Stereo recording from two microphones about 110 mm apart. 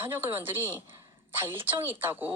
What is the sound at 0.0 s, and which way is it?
Speech, 20° right (ahead or behind).